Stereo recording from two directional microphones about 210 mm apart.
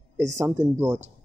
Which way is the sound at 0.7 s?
10° right (ahead or behind).